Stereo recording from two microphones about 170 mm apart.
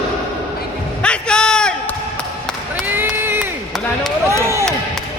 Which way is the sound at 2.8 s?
10° right (ahead or behind).